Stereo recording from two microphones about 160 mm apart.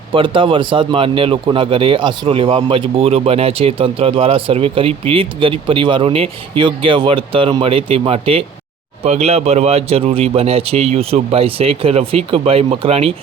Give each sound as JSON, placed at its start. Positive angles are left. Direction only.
{"t": 0.1, "sound": "speech", "side_deg": -30}